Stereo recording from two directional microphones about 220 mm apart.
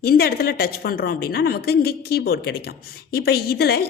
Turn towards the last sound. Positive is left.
turn(degrees=45)  # may be behind; listen again after turning